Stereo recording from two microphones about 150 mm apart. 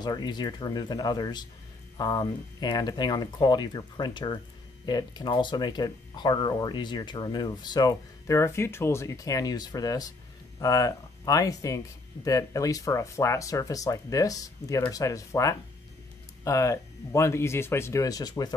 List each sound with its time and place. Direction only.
0.0 s speech: 30° left (ahead or behind)